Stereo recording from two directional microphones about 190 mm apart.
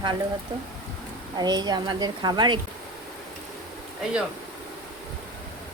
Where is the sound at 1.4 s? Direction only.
20° right (ahead or behind).